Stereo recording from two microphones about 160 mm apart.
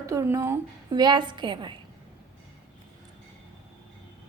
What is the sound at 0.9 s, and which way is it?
Speech, 25° right (ahead or behind).